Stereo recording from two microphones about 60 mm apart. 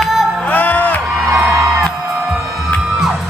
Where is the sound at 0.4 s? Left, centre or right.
Left.